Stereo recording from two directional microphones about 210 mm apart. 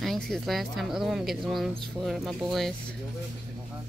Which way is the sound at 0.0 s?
Centre (ahead or behind).